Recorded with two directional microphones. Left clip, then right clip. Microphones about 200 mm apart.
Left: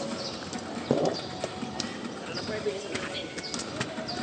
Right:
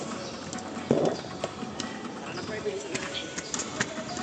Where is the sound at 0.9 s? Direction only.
20° right (ahead or behind).